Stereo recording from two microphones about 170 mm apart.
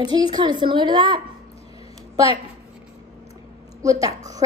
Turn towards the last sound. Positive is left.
turn(degrees=-20)  # may be behind; listen again after turning